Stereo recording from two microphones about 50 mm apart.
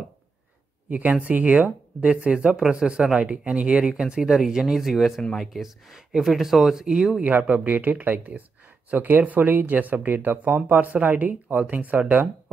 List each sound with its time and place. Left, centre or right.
0.8 s speech: right; by 7.2 s centre
7.2 s speech: right